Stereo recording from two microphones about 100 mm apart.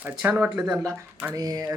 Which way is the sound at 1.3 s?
40° right (ahead or behind).